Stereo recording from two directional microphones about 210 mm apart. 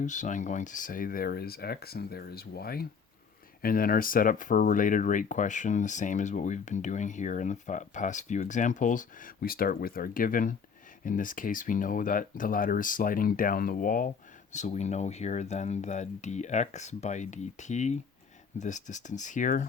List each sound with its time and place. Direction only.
0.0 s speech: 35° left (ahead or behind)